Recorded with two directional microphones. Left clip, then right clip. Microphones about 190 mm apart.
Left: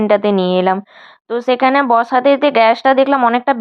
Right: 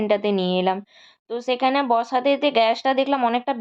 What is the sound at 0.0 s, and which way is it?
Speech, 25° left (ahead or behind).